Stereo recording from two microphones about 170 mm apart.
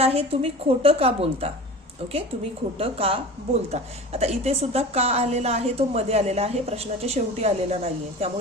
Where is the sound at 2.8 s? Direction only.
35° right (ahead or behind).